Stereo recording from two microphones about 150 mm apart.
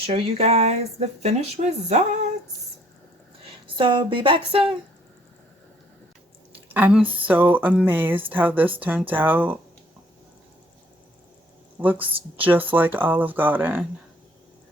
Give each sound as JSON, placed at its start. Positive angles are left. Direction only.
{"t": 0.0, "sound": "speech", "side_deg": -40}
{"t": 3.8, "sound": "a sound", "side_deg": -30}
{"t": 6.7, "sound": "speech", "side_deg": -10}
{"t": 11.8, "sound": "speech", "side_deg": -10}